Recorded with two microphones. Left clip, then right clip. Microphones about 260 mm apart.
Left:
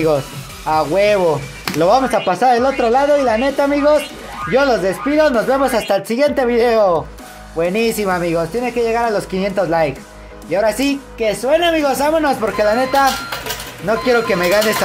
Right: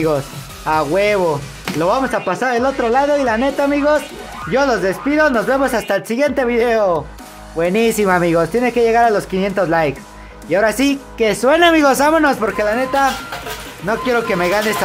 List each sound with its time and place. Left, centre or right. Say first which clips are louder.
0.7 s speech: left 1 dB; centre